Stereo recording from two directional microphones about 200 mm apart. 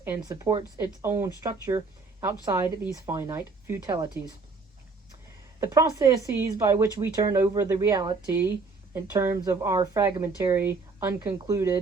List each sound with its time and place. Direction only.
0.0 s speech: 10° right (ahead or behind)
5.5 s speech: 15° right (ahead or behind)